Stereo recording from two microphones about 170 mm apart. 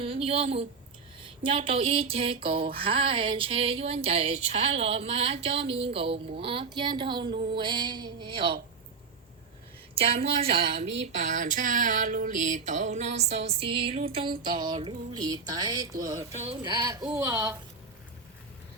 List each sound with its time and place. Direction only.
0.0 s a sound: 35° right (ahead or behind)
6.7 s music: 30° right (ahead or behind)
9.9 s a woman's voice: 35° right (ahead or behind)
10.7 s female singing: 40° right (ahead or behind)
14.4 s music: 30° right (ahead or behind)
16.4 s a sound: 35° right (ahead or behind)
16.7 s music: 20° right (ahead or behind)